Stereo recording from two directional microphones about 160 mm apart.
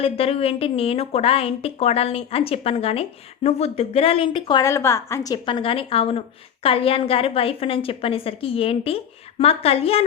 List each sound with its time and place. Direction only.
0.0 s a woman's voice: 35° left (ahead or behind)